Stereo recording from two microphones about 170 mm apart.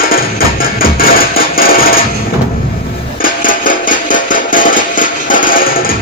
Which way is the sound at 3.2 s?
55° left (ahead or behind).